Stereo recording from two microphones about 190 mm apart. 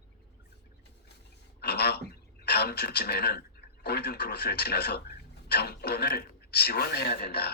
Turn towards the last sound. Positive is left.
turn(degrees=55)  # may be behind; listen again after turning